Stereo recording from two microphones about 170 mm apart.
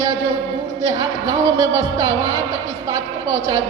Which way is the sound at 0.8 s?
25° right (ahead or behind).